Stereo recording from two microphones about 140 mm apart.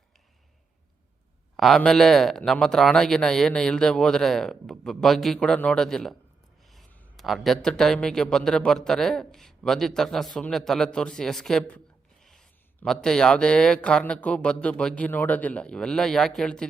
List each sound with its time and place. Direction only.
1.5 s speech: centre (ahead or behind)
7.2 s speech: centre (ahead or behind)